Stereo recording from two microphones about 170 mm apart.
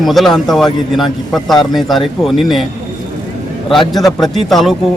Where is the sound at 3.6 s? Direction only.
Centre (ahead or behind).